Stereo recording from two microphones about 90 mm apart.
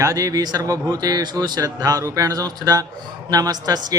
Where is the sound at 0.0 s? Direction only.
40° right (ahead or behind).